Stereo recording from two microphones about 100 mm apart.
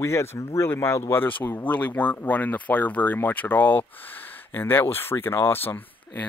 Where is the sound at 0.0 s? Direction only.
30° left (ahead or behind).